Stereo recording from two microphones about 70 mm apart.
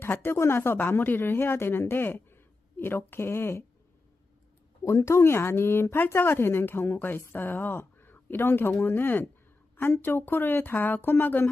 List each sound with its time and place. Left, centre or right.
0.0 s speech: left
4.9 s speech: left